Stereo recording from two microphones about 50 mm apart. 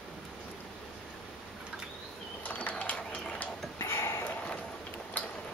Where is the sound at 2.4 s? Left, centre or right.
Left.